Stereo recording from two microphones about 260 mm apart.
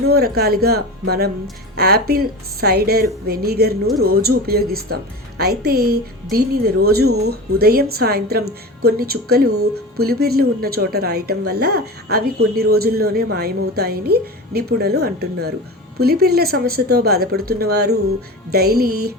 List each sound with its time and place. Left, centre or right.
0.1 s a woman's voice: right